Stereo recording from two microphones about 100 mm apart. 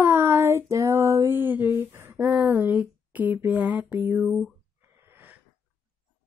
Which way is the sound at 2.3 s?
20° right (ahead or behind).